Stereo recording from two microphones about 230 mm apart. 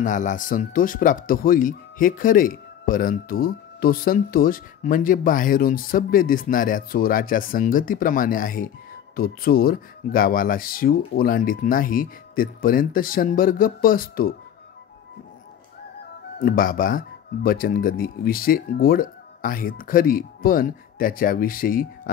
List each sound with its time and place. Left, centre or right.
0.0 s speech: left
16.3 s speech: left